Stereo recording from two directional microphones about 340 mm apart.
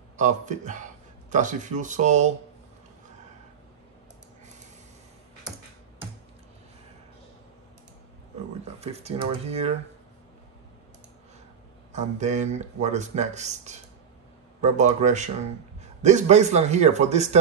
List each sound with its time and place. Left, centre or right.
0.2 s speech: right
8.8 s speech: centre
11.9 s speech: centre